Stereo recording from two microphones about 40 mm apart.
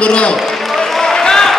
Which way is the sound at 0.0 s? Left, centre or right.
Left.